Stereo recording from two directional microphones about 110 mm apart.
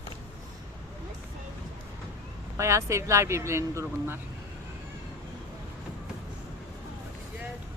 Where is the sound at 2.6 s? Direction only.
25° right (ahead or behind).